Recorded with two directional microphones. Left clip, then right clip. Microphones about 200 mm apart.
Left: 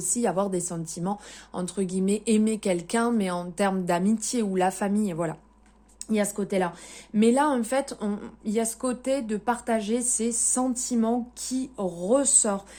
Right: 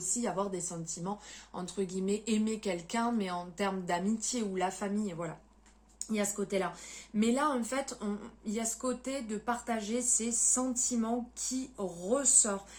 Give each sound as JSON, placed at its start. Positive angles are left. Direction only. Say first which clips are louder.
{"t": 0.1, "sound": "speech", "louder": "left 9 dB", "side_deg": 55}